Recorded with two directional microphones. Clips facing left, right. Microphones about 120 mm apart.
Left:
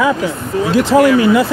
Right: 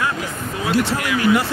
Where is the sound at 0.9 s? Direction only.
90° left.